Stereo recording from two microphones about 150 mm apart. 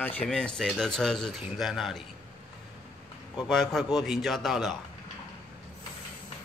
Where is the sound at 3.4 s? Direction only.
Centre (ahead or behind).